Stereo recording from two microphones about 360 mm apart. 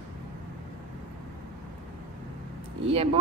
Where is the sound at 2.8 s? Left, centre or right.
Centre.